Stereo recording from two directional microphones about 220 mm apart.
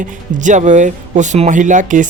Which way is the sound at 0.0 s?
35° right (ahead or behind).